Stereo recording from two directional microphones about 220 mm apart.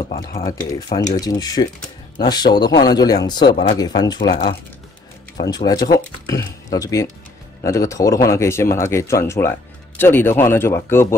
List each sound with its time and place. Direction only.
0.5 s speech: 15° left (ahead or behind)